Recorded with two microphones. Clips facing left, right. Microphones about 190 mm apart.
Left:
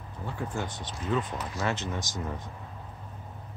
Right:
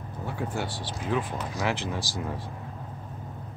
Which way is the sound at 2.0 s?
30° right (ahead or behind).